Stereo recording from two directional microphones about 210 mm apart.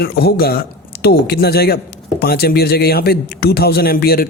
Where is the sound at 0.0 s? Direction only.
50° left (ahead or behind).